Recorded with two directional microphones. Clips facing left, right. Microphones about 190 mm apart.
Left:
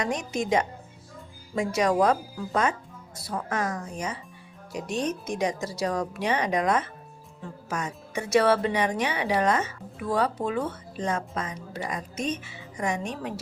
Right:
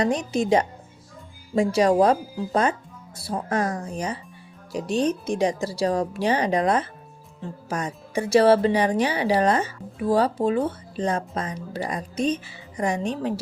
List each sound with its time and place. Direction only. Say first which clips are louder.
0.0 s speech: right 6 dB; 30° right (ahead or behind)